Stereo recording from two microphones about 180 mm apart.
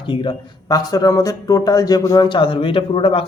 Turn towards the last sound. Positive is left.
turn(degrees=30)  # may be behind; listen again after turning